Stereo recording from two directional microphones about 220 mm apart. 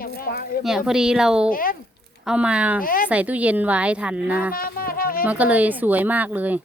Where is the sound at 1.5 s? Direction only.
40° left (ahead or behind).